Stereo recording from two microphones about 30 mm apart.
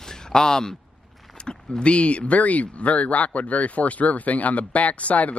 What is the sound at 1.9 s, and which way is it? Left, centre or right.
Speech, left.